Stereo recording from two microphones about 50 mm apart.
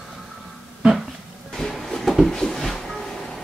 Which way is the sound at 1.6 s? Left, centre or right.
Centre.